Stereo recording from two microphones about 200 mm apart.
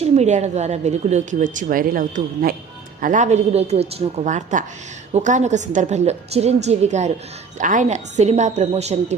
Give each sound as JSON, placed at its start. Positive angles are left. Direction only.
{"t": 0.0, "sound": "a woman's voice", "side_deg": -35}